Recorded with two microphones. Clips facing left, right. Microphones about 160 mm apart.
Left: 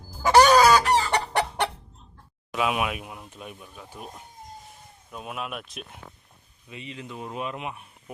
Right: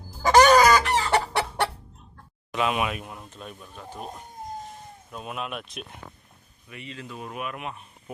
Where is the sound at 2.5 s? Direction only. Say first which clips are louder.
Even; 5° left (ahead or behind).